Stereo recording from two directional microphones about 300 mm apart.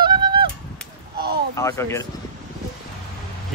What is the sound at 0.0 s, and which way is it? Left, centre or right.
Honk, centre.